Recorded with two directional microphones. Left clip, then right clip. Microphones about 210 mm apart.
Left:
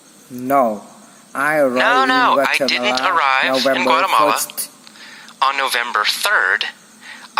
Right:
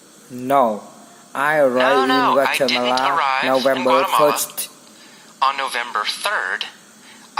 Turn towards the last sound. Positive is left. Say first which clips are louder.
# left 4 dB
turn(degrees=30)  # may be behind; listen again after turning